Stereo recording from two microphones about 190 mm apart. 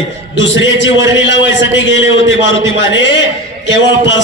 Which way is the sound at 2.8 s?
70° left (ahead or behind).